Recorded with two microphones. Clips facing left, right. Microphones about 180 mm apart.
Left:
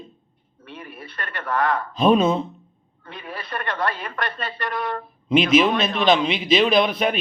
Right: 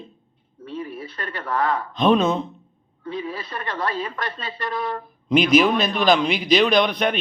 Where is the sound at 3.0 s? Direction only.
65° left (ahead or behind).